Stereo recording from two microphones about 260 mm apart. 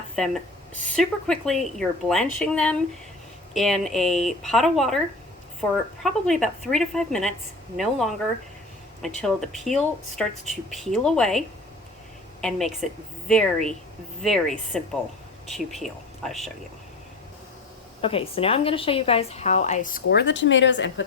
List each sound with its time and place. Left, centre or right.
0.2 s speech: centre
18.0 s a woman's voice: left